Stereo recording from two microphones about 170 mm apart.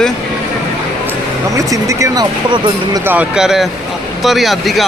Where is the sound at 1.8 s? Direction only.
20° right (ahead or behind).